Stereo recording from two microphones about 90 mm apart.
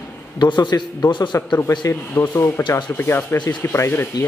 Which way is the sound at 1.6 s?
30° left (ahead or behind).